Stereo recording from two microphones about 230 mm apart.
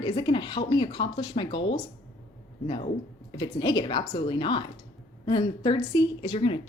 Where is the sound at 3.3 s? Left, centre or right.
Centre.